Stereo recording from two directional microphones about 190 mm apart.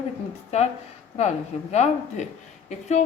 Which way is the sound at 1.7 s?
35° left (ahead or behind).